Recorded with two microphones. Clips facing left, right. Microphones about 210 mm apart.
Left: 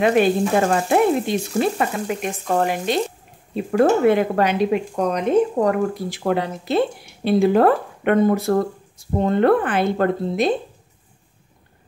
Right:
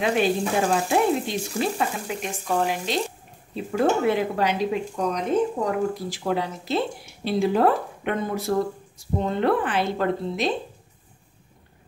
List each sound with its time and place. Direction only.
0.0 s speech: 55° left (ahead or behind)